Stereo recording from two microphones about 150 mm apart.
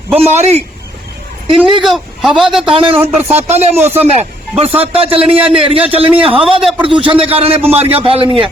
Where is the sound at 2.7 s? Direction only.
35° right (ahead or behind).